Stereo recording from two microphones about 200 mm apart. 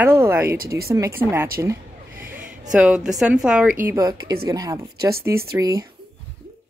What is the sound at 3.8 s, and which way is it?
Speech, 15° right (ahead or behind).